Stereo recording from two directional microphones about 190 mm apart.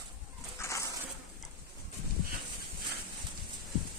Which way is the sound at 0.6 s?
15° left (ahead or behind).